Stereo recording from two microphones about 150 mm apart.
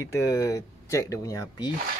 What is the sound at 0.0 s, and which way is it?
Speech, 20° left (ahead or behind).